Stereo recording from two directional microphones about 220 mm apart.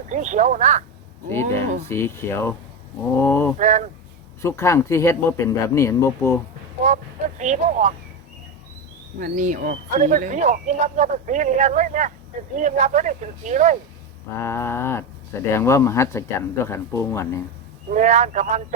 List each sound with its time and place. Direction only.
0.1 s speech: 35° right (ahead or behind)
1.3 s speech: 10° left (ahead or behind)
3.6 s speech: 35° right (ahead or behind)
4.4 s speech: 10° left (ahead or behind)
6.8 s speech: 35° right (ahead or behind)
9.1 s speech: 35° right (ahead or behind)
14.3 s speech: 10° left (ahead or behind)
17.9 s speech: 35° right (ahead or behind)